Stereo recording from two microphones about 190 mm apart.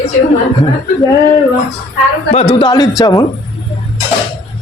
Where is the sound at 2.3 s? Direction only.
30° left (ahead or behind).